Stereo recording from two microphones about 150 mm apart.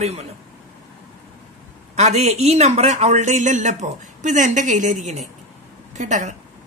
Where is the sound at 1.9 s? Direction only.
50° right (ahead or behind).